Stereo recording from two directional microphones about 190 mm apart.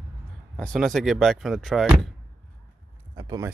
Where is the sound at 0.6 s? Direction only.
Centre (ahead or behind).